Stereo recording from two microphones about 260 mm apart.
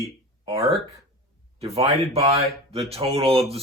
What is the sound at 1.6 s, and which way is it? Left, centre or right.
Speech, right.